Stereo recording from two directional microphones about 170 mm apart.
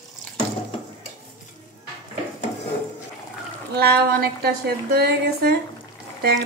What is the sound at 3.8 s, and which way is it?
A woman's voice, 65° right (ahead or behind).